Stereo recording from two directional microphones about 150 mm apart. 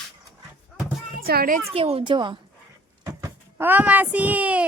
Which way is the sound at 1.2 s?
90° right.